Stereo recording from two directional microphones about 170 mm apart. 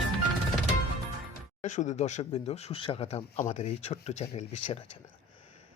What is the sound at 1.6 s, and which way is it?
Speech, 45° left (ahead or behind).